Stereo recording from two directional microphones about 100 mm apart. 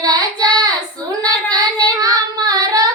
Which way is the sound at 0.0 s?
40° right (ahead or behind).